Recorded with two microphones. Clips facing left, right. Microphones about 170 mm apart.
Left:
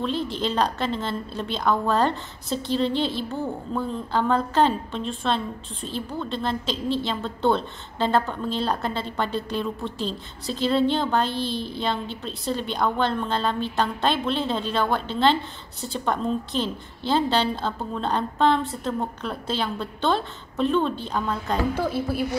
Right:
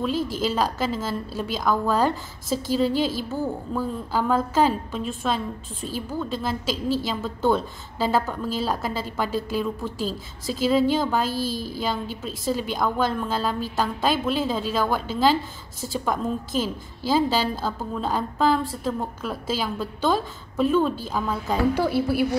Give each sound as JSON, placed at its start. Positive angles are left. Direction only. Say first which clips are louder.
{"t": 0.3, "sound": "a woman's voice", "louder": "even", "side_deg": -5}